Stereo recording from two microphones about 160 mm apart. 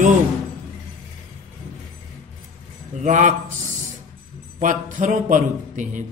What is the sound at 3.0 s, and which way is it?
Speech, 50° right (ahead or behind).